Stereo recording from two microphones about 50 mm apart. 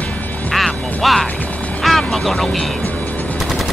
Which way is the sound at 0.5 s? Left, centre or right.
Centre.